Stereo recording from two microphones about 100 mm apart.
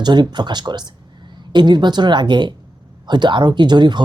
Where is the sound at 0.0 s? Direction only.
45° right (ahead or behind).